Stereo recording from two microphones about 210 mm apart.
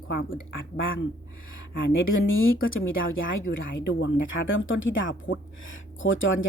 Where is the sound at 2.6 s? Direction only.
70° left (ahead or behind).